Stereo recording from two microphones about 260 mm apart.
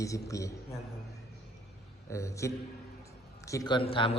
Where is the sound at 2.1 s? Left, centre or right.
Centre.